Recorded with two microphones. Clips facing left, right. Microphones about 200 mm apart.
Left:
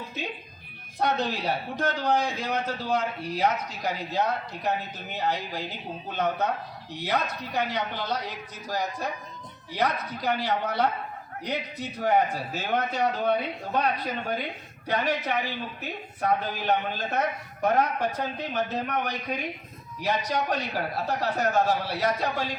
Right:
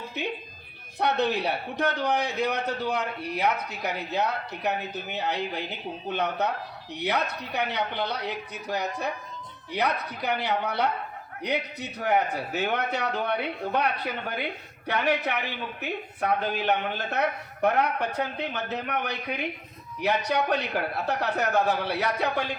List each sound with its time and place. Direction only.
0.2 s a man's voice: 65° right (ahead or behind)